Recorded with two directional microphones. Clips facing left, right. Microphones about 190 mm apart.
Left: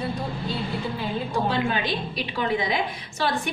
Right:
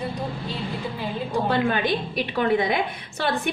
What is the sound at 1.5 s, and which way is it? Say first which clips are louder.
A woman's voice: right 6 dB; 55° right (ahead or behind).